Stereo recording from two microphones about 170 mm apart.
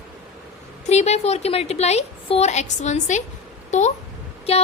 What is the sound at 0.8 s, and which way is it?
A woman's voice, 40° left (ahead or behind).